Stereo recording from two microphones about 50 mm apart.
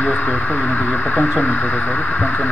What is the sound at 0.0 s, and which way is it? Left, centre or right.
Speech, left.